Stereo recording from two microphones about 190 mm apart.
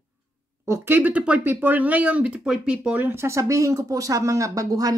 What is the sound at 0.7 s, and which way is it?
Speech, 10° right (ahead or behind).